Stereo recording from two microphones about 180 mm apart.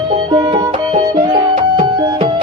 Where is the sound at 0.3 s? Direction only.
25° right (ahead or behind).